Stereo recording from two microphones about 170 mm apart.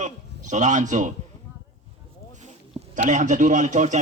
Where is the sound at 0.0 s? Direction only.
45° right (ahead or behind).